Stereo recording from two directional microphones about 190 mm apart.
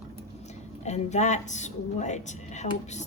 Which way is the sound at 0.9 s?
35° left (ahead or behind).